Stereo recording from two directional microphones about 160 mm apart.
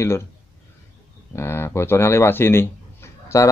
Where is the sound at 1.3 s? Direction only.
15° left (ahead or behind).